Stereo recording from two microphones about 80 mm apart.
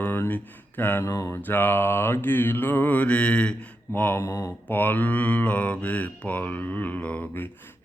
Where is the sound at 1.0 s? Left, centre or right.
Left.